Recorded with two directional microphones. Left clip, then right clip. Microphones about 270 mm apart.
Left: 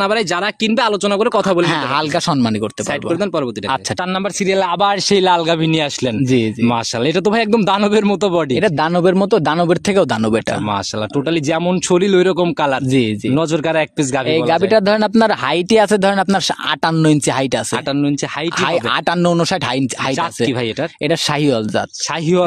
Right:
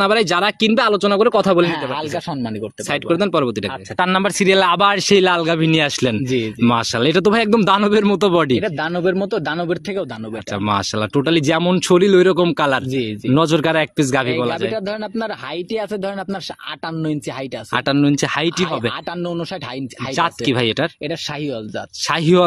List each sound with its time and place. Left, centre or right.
0.0 s speech: centre
3.1 s speech: centre
8.5 s speech: left
10.7 s speech: centre
14.7 s speech: left
17.9 s speech: centre
18.6 s speech: left
20.2 s speech: centre
21.1 s speech: left